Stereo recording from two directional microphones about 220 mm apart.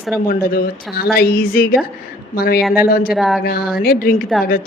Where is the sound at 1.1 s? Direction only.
40° left (ahead or behind).